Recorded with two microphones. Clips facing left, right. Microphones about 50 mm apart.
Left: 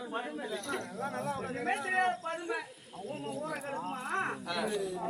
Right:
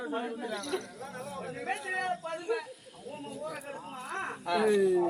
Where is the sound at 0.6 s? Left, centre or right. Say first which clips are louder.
Even; left.